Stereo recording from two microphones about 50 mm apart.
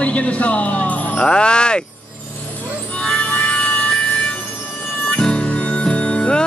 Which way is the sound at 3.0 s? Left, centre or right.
Left.